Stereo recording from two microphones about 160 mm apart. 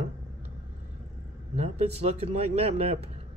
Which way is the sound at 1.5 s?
40° right (ahead or behind).